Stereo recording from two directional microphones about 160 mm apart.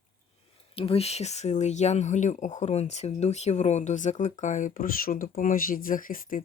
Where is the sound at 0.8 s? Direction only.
40° left (ahead or behind).